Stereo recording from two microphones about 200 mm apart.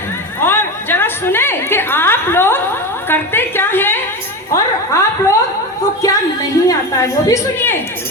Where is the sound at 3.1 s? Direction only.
10° left (ahead or behind).